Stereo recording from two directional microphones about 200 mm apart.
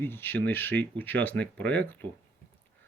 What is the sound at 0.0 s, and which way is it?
Speech, 10° left (ahead or behind).